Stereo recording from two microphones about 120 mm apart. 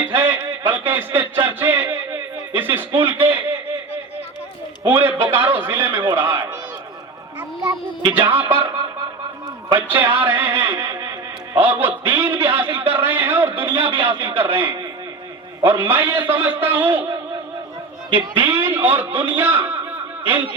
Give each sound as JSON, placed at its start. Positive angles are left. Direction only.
{"t": 0.1, "sound": "a sound", "side_deg": -20}
{"t": 2.6, "sound": "a man's voice", "side_deg": -15}
{"t": 4.9, "sound": "a man's voice", "side_deg": -20}
{"t": 7.6, "sound": "a man's voice", "side_deg": -30}
{"t": 8.1, "sound": "a man's voice", "side_deg": -15}
{"t": 9.7, "sound": "a man's voice", "side_deg": -20}
{"t": 18.1, "sound": "a man's voice", "side_deg": -15}